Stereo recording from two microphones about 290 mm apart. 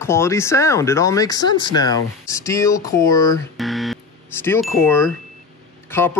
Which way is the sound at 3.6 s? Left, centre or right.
Centre.